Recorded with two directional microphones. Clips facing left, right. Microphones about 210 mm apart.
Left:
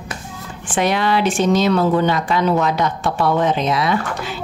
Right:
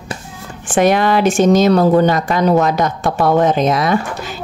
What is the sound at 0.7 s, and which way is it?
A woman's voice, 45° right (ahead or behind).